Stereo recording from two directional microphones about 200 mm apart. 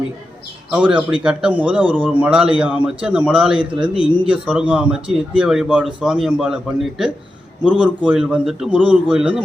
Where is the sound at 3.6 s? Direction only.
25° right (ahead or behind).